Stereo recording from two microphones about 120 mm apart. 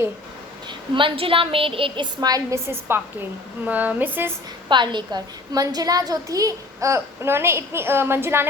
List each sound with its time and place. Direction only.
0.7 s a woman's voice: 45° right (ahead or behind)
2.2 s a child's voice: 30° right (ahead or behind)
4.7 s a child's voice: 40° right (ahead or behind); by 8.4 s 20° right (ahead or behind)